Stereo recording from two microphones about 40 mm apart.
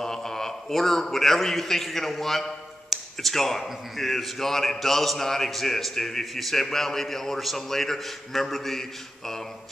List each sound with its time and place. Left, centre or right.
0.0 s a man's voice: centre